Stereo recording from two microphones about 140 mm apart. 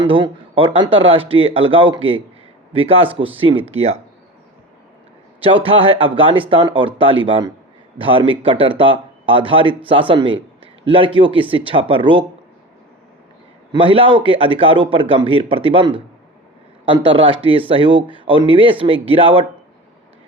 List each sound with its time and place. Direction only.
0.0 s speech: 40° right (ahead or behind)
5.4 s speech: 40° right (ahead or behind)
13.7 s speech: 40° right (ahead or behind)